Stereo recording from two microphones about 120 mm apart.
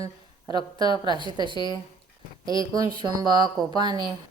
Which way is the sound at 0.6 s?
45° left (ahead or behind).